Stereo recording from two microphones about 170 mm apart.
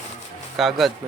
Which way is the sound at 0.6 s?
Centre (ahead or behind).